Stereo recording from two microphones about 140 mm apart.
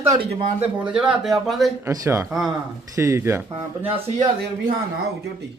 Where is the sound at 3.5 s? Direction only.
45° right (ahead or behind).